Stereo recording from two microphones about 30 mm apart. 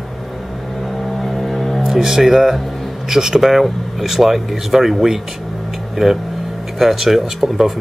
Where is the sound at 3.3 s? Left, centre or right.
Centre.